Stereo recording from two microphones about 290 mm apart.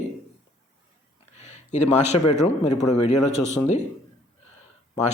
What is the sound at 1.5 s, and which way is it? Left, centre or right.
A man's voice, left.